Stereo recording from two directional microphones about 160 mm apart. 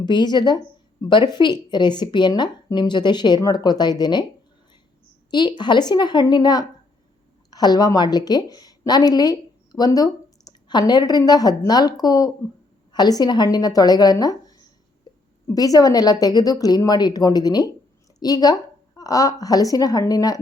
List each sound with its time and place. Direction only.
0.0 s speech: 25° left (ahead or behind)
5.3 s a woman's voice: 25° left (ahead or behind)
15.1 s a sound: 25° left (ahead or behind)
15.4 s a woman's voice: 20° left (ahead or behind)